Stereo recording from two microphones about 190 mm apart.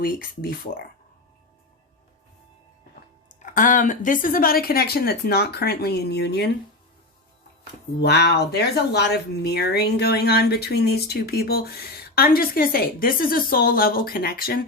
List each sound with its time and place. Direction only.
0.0 s speech: 50° left (ahead or behind)
3.4 s speech: 45° left (ahead or behind); by 6.5 s 60° left (ahead or behind)
8.0 s speech: 60° left (ahead or behind)